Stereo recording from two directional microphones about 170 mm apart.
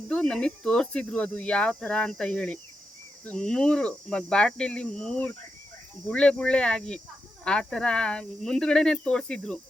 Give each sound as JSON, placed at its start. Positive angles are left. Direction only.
{"t": 0.1, "sound": "speech", "side_deg": 5}